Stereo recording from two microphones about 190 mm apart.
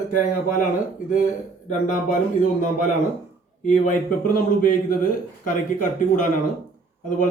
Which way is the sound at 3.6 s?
40° left (ahead or behind).